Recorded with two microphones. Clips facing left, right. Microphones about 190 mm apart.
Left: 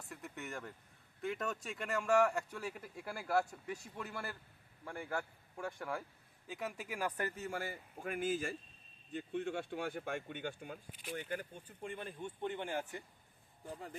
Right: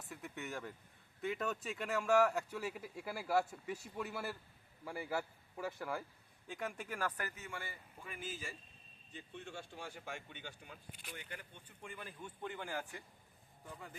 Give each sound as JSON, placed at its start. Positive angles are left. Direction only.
{"t": 0.1, "sound": "speech", "side_deg": 0}
{"t": 7.2, "sound": "speech", "side_deg": 30}
{"t": 13.7, "sound": "speech", "side_deg": 35}